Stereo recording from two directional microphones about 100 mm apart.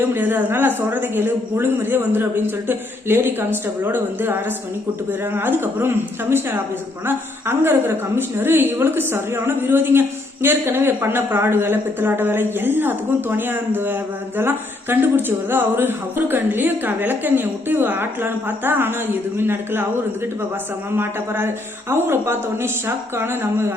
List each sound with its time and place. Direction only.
0.1 s speech: 20° right (ahead or behind)
20.9 s speech: 20° right (ahead or behind)